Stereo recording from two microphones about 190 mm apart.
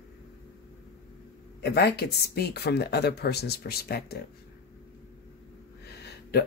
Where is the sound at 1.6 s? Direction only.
60° left (ahead or behind).